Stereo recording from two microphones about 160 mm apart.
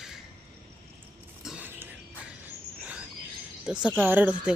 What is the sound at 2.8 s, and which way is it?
Cricket, 10° right (ahead or behind).